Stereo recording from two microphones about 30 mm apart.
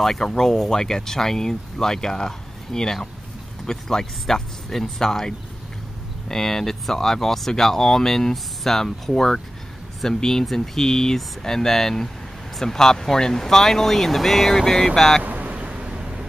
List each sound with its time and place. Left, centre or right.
0.0 s speech: centre
15.2 s a sound: right
15.5 s vehicle: right
15.9 s vehicle: right